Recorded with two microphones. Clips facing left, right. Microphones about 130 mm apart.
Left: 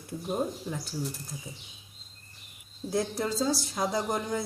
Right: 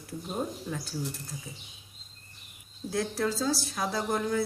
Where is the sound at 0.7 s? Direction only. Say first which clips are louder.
Even; 15° left (ahead or behind).